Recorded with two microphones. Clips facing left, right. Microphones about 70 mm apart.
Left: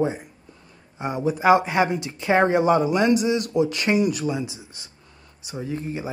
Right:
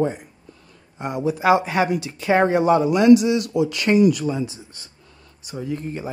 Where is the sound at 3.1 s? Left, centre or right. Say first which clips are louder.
Right 7 dB; left.